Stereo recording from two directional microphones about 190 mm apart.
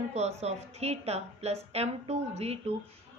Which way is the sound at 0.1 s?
35° right (ahead or behind).